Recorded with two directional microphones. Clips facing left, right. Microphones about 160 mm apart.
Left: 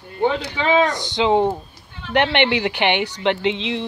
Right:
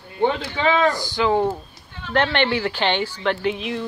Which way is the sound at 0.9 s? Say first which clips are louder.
Left 2 dB; 20° left (ahead or behind).